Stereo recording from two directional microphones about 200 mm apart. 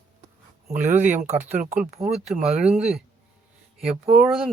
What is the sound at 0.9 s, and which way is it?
Speech, 10° right (ahead or behind).